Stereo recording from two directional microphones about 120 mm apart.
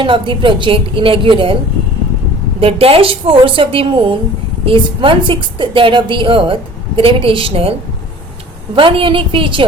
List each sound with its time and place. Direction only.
0.0 s a woman's voice: 45° right (ahead or behind)
2.6 s a woman's voice: 50° right (ahead or behind)